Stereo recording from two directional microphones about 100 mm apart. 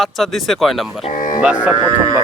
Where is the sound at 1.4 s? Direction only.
15° right (ahead or behind).